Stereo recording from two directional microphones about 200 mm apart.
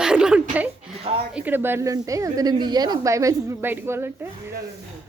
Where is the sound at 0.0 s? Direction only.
5° right (ahead or behind).